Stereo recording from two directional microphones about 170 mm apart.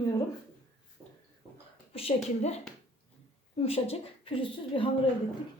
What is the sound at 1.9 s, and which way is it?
Speech, 35° left (ahead or behind).